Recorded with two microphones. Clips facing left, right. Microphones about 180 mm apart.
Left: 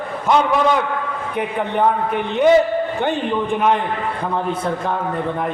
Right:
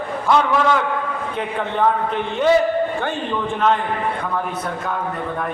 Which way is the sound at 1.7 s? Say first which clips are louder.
Left 1 dB; 15° left (ahead or behind).